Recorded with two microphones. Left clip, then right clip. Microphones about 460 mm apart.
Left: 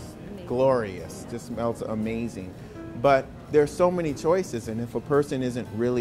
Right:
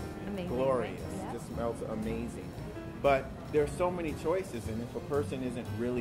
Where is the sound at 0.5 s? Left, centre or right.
Left.